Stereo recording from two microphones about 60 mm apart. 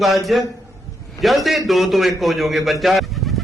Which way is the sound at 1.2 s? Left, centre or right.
Centre.